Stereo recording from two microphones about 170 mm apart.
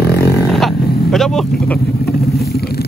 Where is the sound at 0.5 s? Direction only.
Centre (ahead or behind).